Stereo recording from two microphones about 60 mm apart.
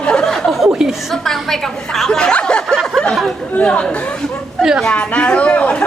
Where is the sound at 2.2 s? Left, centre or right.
Centre.